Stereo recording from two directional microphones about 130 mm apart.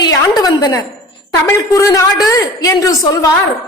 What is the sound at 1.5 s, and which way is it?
A woman's voice, 20° left (ahead or behind).